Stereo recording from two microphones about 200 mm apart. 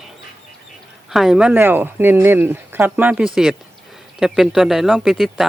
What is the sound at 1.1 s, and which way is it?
Speech, centre (ahead or behind).